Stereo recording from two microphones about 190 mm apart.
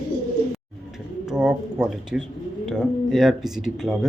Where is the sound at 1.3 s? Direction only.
5° right (ahead or behind).